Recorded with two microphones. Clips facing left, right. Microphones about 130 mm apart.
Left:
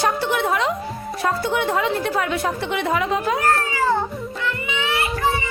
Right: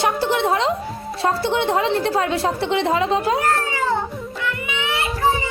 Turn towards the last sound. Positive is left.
turn(degrees=-20)  # may be behind; listen again after turning